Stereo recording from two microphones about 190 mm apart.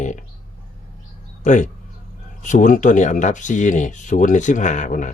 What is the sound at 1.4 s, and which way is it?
Speech, 40° left (ahead or behind).